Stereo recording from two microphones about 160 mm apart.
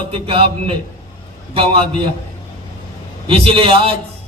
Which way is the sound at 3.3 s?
35° right (ahead or behind).